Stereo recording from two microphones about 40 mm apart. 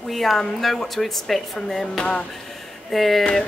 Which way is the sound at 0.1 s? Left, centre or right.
Centre.